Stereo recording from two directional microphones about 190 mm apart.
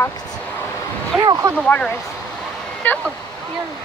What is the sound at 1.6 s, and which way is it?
Speech, 5° left (ahead or behind).